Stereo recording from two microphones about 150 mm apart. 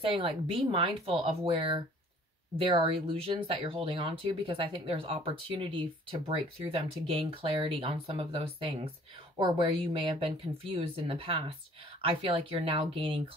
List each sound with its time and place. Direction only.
0.0 s speech: 35° right (ahead or behind)